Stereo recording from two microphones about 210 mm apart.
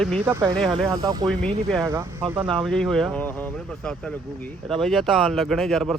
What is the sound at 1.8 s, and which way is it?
Speech, 15° right (ahead or behind).